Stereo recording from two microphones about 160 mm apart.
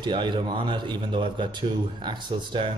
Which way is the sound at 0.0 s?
30° right (ahead or behind).